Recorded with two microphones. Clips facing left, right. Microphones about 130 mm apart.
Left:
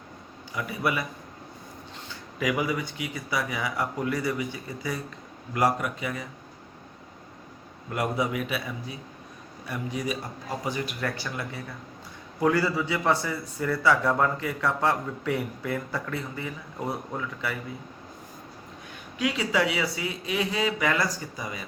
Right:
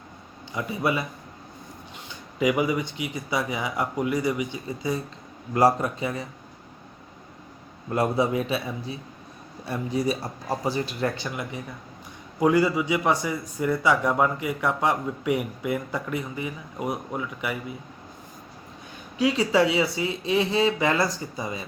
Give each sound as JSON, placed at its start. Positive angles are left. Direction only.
{"t": 0.5, "sound": "speech", "side_deg": -25}
{"t": 2.0, "sound": "speech", "side_deg": -20}
{"t": 7.9, "sound": "a man's voice", "side_deg": -30}
{"t": 19.2, "sound": "speech", "side_deg": -30}